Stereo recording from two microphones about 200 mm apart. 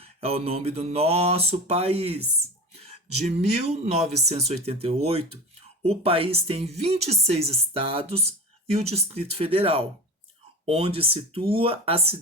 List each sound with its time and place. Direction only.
0.0 s speech: 30° right (ahead or behind)